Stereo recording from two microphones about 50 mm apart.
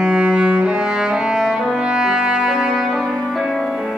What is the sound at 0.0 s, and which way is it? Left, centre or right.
Music, right.